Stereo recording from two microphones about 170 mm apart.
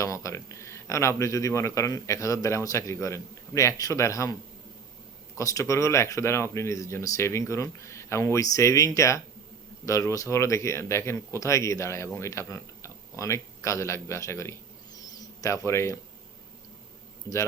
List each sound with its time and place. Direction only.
0.0 s speech: 20° left (ahead or behind)
5.4 s speech: 20° left (ahead or behind)
14.9 s a sound: 20° left (ahead or behind)
17.3 s a man's voice: 15° right (ahead or behind)